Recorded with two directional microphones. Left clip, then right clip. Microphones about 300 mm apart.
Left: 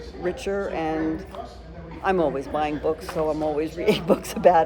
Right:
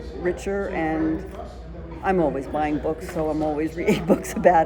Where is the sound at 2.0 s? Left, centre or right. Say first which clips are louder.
Even; centre.